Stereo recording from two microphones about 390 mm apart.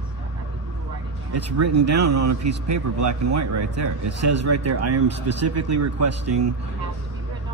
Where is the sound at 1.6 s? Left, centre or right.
Right.